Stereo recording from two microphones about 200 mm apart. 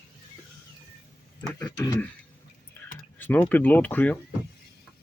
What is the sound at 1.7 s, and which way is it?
Speech, 20° left (ahead or behind).